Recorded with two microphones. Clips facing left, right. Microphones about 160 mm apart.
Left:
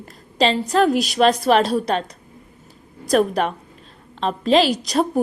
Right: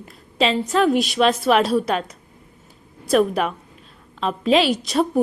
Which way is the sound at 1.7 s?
35° left (ahead or behind).